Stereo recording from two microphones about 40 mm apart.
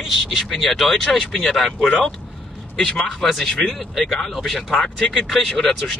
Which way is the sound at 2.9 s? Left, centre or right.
Centre.